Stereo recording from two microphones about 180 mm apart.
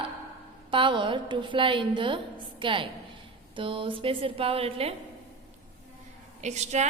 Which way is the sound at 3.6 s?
30° right (ahead or behind).